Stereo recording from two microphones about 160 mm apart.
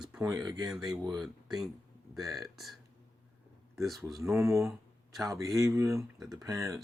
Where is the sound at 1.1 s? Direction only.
Centre (ahead or behind).